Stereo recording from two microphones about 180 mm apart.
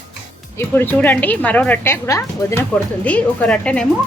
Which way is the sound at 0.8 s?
10° left (ahead or behind).